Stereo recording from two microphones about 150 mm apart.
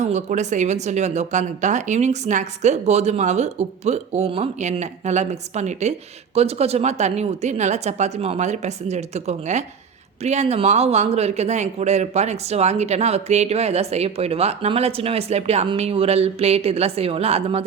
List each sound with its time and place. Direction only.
0.0 s speech: 50° right (ahead or behind)